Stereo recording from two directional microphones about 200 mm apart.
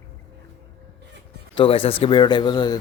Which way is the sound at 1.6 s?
25° left (ahead or behind).